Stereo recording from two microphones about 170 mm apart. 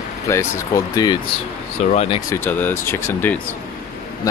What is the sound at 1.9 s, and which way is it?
Speech, 35° left (ahead or behind).